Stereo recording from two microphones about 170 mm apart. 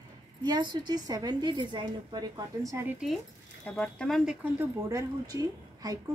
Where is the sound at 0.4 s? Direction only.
25° right (ahead or behind).